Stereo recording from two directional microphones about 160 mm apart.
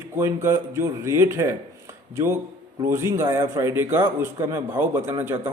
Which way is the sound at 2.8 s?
15° right (ahead or behind).